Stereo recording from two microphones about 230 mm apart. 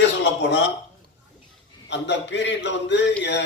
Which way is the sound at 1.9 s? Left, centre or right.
Left.